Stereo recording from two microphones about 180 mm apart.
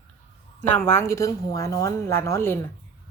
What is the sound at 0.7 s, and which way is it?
A woman's voice, 10° left (ahead or behind).